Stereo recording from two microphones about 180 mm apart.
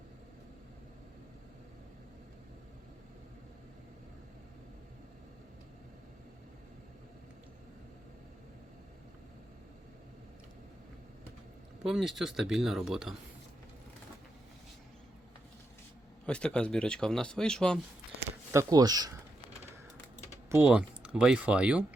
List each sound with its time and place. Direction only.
11.8 s speech: centre (ahead or behind)
16.2 s speech: 5° left (ahead or behind)
18.5 s speech: 20° right (ahead or behind)
20.5 s speech: 10° right (ahead or behind)